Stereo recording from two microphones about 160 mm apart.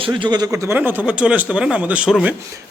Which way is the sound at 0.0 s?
30° right (ahead or behind).